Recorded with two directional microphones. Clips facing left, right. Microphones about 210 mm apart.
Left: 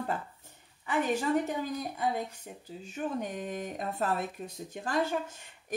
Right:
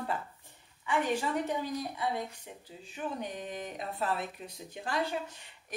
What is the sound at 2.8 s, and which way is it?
Speech, 45° left (ahead or behind).